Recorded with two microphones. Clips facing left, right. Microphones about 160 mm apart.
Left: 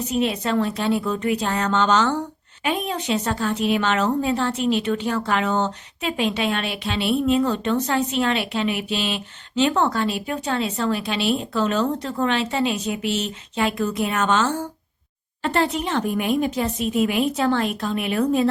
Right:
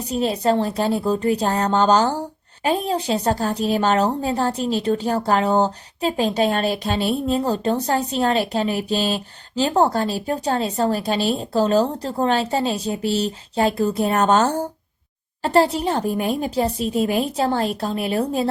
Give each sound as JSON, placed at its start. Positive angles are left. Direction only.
{"t": 0.1, "sound": "a woman's voice", "side_deg": -35}